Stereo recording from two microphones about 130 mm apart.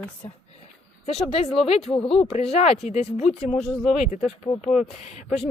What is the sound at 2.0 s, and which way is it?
Speech, 5° left (ahead or behind).